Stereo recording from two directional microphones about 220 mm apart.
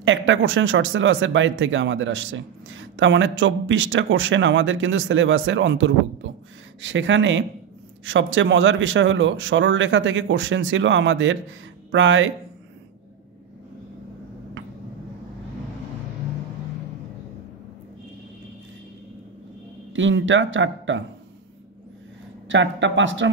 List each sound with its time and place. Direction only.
0.0 s speech: 60° right (ahead or behind)
19.9 s speech: 60° right (ahead or behind)
22.5 s speech: 55° right (ahead or behind)